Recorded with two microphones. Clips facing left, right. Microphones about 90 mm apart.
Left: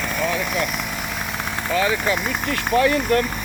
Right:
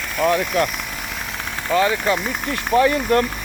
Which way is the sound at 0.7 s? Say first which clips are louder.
Left 2 dB; 10° left (ahead or behind).